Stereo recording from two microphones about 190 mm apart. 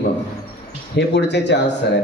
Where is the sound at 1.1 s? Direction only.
65° left (ahead or behind).